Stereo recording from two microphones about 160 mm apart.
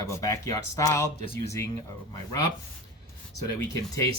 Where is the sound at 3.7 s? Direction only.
20° left (ahead or behind).